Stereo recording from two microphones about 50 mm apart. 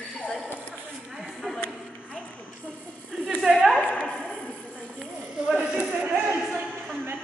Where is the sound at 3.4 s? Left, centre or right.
Centre.